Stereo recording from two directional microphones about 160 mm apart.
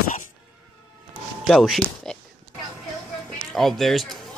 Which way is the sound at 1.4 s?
Centre (ahead or behind).